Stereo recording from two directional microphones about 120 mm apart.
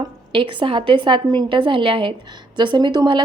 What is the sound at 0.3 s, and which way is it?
A woman's voice, 45° right (ahead or behind).